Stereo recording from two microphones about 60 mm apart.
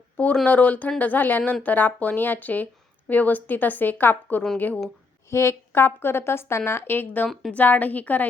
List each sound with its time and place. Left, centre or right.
0.4 s a woman's voice: left
5.3 s a woman's voice: left